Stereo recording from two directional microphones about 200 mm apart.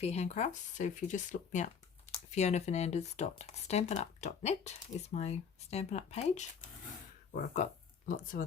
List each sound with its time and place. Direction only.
0.0 s speech: 35° left (ahead or behind)
7.5 s speech: 40° left (ahead or behind)